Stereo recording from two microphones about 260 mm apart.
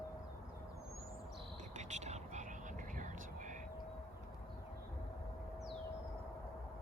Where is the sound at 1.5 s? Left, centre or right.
Right.